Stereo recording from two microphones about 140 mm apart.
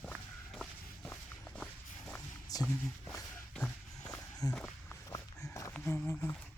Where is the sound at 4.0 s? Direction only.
25° left (ahead or behind).